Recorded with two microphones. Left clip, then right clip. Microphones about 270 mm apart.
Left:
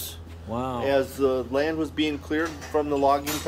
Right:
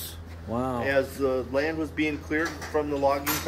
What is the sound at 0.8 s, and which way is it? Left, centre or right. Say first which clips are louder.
Speech: left 4 dB; left.